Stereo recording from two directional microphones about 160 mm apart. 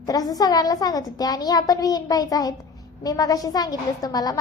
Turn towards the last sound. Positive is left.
turn(degrees=25)  # may be behind; listen again after turning